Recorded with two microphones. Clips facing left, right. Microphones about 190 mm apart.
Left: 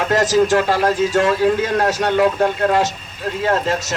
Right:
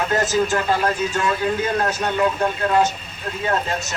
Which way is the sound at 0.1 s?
85° left.